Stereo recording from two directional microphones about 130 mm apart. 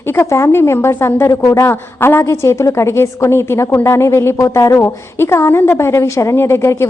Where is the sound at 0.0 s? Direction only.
15° left (ahead or behind).